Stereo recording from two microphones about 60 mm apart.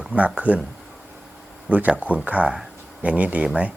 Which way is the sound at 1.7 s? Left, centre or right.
Right.